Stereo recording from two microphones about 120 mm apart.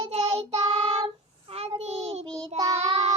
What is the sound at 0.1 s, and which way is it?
Child singing, 60° right (ahead or behind).